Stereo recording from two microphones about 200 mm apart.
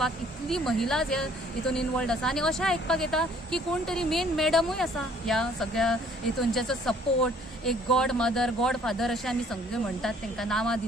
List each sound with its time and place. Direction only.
0.5 s speech: centre (ahead or behind)